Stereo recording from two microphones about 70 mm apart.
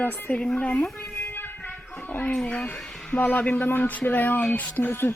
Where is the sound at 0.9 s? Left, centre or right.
Left.